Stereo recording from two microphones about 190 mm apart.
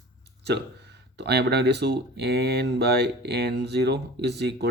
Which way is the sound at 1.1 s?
60° right (ahead or behind).